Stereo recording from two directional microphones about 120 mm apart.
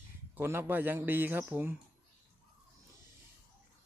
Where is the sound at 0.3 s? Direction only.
20° right (ahead or behind).